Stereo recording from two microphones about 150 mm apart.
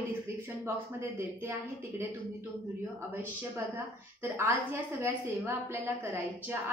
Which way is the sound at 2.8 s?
15° right (ahead or behind).